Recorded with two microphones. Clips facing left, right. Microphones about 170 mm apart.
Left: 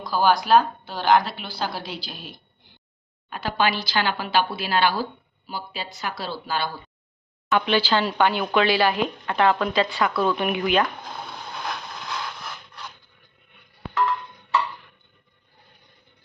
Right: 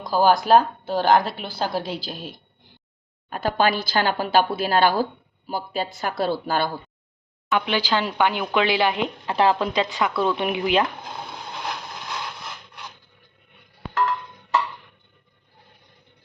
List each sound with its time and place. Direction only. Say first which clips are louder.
0.0 s speech: right 2 dB; 45° right (ahead or behind)
7.5 s speech: left 1 dB; 15° right (ahead or behind); by 9.6 s 30° right (ahead or behind)
9.7 s speech: even; 15° right (ahead or behind)
11.5 s scratch: even; 15° right (ahead or behind)